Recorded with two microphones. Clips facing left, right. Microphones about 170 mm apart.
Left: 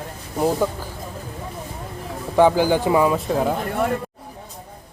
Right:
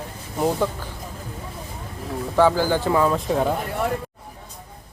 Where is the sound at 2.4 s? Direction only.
15° left (ahead or behind).